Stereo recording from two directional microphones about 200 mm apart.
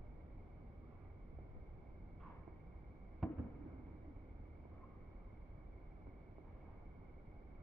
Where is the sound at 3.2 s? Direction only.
Centre (ahead or behind).